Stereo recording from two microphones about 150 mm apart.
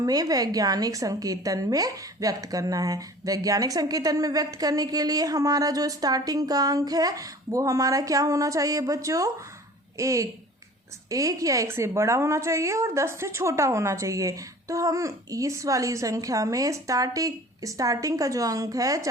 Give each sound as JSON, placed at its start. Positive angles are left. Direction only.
{"t": 0.0, "sound": "a woman's voice", "side_deg": -25}